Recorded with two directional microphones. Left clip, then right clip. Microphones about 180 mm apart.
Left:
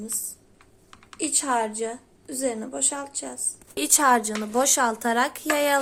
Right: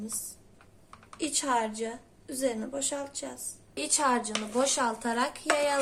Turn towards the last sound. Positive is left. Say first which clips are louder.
# left 4 dB
turn(degrees=50)  # may be behind; listen again after turning